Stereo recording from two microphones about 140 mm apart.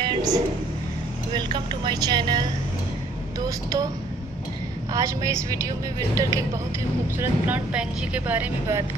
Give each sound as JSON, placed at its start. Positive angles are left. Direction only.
{"t": 0.0, "sound": "vehicle", "side_deg": -30}
{"t": 1.3, "sound": "speech", "side_deg": -30}
{"t": 4.9, "sound": "speech", "side_deg": -25}
{"t": 7.2, "sound": "speech", "side_deg": -10}